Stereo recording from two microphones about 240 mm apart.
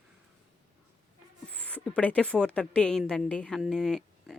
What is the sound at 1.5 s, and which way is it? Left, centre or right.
A woman's voice, centre.